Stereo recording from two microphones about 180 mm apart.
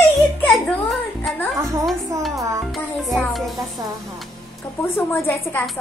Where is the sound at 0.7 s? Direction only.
Centre (ahead or behind).